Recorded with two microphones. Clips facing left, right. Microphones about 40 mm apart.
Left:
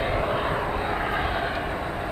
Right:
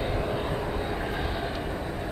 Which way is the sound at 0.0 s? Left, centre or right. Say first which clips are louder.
Left 4 dB; left.